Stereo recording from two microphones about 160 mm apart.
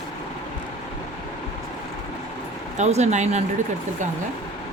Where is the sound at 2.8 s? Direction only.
45° right (ahead or behind).